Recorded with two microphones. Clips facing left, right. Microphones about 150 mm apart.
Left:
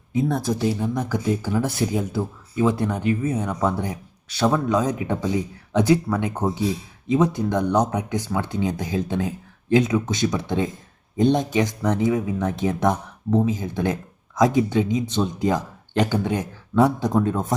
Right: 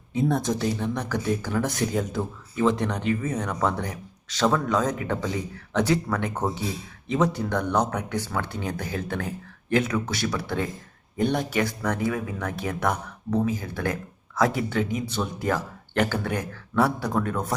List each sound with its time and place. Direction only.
0.3 s speech: centre (ahead or behind); by 17.4 s 20° left (ahead or behind)